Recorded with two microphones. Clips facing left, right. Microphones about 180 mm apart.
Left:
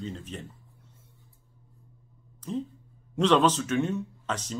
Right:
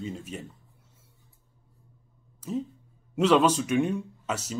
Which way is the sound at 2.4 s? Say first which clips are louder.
Right 1 dB; 5° right (ahead or behind).